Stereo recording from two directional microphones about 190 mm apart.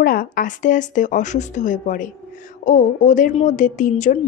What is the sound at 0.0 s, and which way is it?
Speech, 50° left (ahead or behind).